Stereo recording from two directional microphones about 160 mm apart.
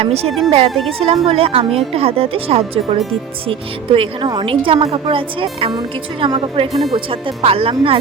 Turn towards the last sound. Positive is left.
turn(degrees=-35)  # may be behind; listen again after turning